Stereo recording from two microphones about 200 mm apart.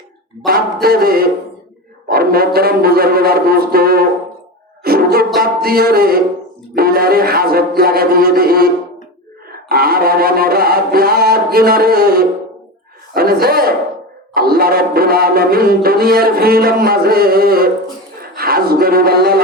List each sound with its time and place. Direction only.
0.4 s music: 50° right (ahead or behind)
6.7 s speech: 50° right (ahead or behind)
7.8 s music: 50° right (ahead or behind)
18.2 s a sound: 50° right (ahead or behind)